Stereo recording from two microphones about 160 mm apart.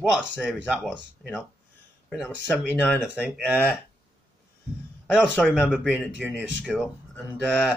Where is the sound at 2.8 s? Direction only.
Centre (ahead or behind).